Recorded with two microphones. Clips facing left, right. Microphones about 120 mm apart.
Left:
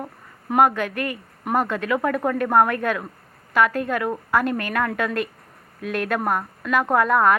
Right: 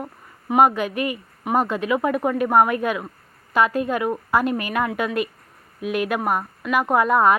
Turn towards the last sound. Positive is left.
turn(degrees=-20)  # may be behind; listen again after turning